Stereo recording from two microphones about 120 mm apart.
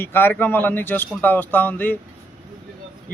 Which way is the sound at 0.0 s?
15° left (ahead or behind).